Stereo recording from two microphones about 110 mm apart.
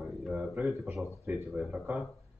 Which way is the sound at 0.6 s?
15° right (ahead or behind).